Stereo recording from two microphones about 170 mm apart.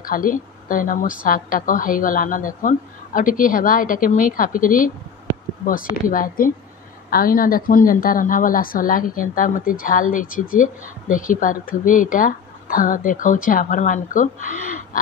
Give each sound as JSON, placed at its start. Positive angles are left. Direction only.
{"t": 0.0, "sound": "a woman's voice", "side_deg": 55}